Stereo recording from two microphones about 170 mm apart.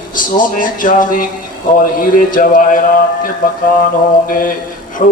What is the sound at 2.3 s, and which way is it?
Speech, 55° left (ahead or behind).